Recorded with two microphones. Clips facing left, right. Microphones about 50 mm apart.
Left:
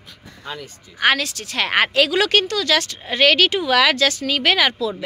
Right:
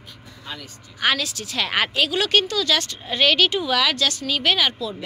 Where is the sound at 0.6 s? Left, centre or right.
Left.